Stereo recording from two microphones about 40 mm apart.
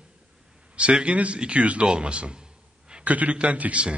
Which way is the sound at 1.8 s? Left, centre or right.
Right.